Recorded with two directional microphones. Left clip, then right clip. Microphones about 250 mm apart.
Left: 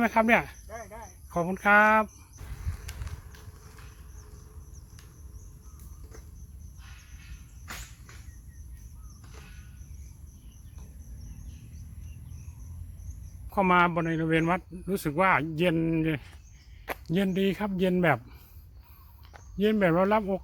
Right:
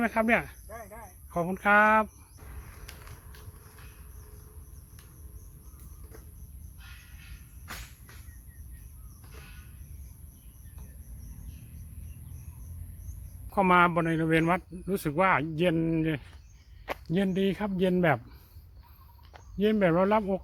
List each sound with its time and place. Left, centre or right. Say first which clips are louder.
0.0 s speech: left 3 dB; centre
2.7 s a sound: even; centre
13.5 s speech: right 1 dB; centre
19.5 s speech: left 1 dB; centre